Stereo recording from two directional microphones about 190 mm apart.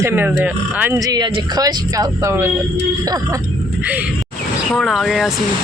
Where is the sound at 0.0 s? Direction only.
10° right (ahead or behind).